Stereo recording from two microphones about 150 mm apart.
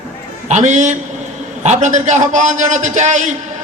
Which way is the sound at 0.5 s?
55° right (ahead or behind).